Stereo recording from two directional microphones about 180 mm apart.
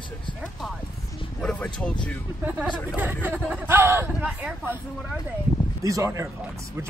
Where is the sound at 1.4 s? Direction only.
5° left (ahead or behind).